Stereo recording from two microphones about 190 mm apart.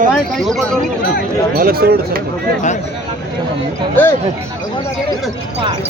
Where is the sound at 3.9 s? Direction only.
10° left (ahead or behind).